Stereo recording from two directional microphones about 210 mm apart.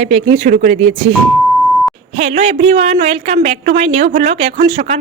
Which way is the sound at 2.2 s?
30° right (ahead or behind).